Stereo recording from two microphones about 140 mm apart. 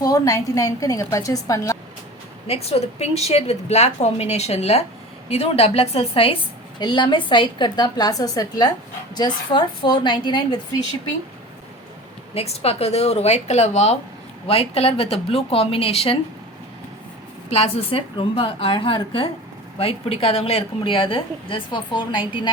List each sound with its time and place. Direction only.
0.0 s a woman's voice: 25° left (ahead or behind)
2.5 s a woman's voice: 45° left (ahead or behind)
12.3 s a woman's voice: 45° left (ahead or behind)
17.5 s a woman's voice: 45° left (ahead or behind)